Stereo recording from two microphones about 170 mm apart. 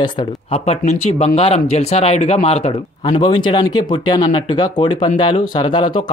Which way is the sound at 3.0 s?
25° left (ahead or behind).